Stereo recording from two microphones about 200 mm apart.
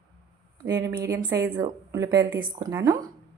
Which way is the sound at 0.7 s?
20° right (ahead or behind).